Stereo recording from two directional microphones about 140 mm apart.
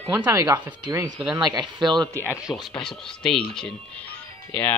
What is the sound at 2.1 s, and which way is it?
Speech, 10° right (ahead or behind).